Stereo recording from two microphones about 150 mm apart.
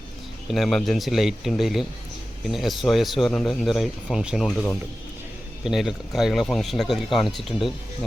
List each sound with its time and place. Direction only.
0.4 s speech: centre (ahead or behind)